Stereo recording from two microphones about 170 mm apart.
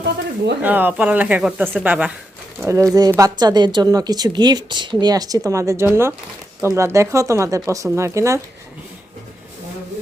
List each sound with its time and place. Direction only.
0.6 s a woman's voice: 10° right (ahead or behind)